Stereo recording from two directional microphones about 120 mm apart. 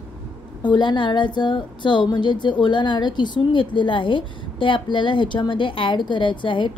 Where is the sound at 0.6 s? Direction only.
40° left (ahead or behind).